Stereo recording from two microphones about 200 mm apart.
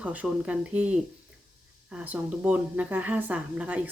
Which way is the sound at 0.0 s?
5° right (ahead or behind).